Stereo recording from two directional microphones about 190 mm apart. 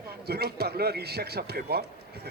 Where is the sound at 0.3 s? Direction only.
55° right (ahead or behind).